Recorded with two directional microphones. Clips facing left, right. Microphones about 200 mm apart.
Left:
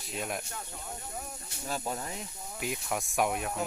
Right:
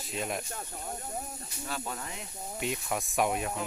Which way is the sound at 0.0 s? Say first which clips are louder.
Right 1 dB; centre (ahead or behind).